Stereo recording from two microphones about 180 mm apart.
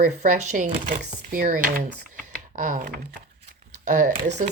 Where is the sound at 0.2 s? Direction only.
45° right (ahead or behind).